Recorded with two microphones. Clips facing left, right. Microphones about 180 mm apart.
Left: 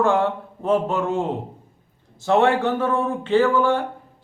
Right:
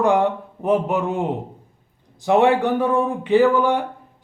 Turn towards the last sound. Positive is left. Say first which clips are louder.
# right 2 dB
turn(degrees=-15)  # may be behind; listen again after turning